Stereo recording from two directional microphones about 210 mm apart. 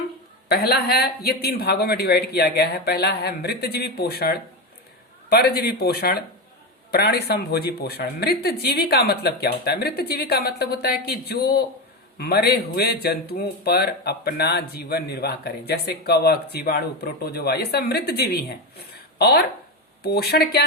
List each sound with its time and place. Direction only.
0.4 s speech: 50° left (ahead or behind)